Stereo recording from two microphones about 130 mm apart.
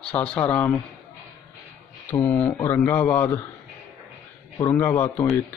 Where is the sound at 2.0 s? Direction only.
15° left (ahead or behind).